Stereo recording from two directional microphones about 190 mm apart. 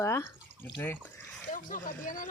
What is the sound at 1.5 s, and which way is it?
Speech, 45° left (ahead or behind).